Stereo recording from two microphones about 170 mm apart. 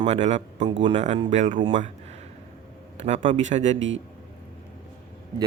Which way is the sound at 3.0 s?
45° right (ahead or behind).